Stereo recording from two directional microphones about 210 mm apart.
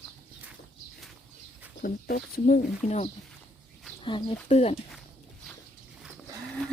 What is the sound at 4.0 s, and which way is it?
Speech, 20° left (ahead or behind).